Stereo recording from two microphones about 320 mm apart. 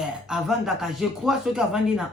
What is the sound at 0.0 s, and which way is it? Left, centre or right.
Speech, centre.